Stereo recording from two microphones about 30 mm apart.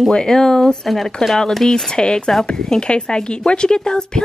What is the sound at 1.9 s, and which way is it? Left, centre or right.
A woman's voice, left.